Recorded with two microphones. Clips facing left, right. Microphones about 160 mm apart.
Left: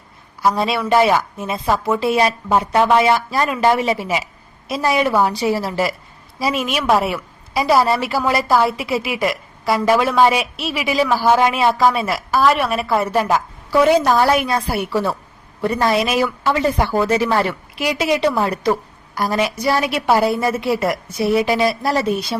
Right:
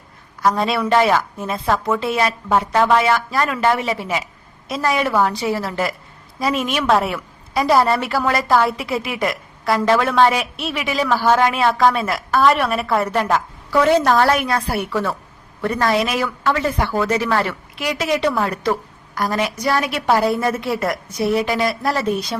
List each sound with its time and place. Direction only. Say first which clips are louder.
0.4 s a woman's voice: even; 5° left (ahead or behind)
17.9 s a woman's voice: left 2 dB; 30° left (ahead or behind)
18.2 s a woman's voice: left 2 dB; 15° left (ahead or behind)
19.2 s a woman's voice: left 2 dB; 25° left (ahead or behind)
20.1 s a woman's voice: left 1 dB; 10° left (ahead or behind)
21.4 s a woman's voice: left 2 dB; 25° left (ahead or behind)